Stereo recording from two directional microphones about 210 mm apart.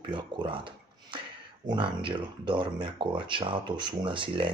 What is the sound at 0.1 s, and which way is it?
Speech, 25° right (ahead or behind).